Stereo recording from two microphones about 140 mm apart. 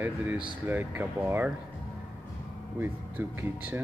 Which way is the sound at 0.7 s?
15° right (ahead or behind).